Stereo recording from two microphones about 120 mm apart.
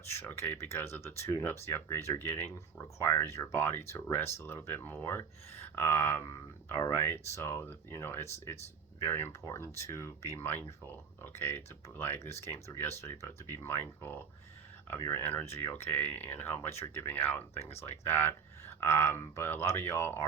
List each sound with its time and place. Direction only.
0.1 s speech: 20° left (ahead or behind)